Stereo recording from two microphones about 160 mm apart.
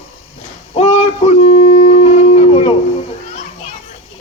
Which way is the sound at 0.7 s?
40° left (ahead or behind).